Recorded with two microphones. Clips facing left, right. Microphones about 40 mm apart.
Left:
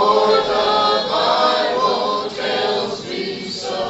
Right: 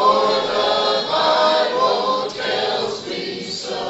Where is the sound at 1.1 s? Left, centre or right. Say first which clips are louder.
Even; centre.